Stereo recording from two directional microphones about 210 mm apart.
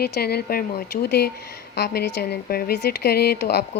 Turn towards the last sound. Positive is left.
turn(degrees=55)  # may be behind; listen again after turning